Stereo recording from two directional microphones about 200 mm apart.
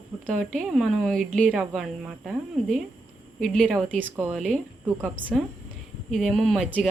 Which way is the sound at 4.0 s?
10° right (ahead or behind).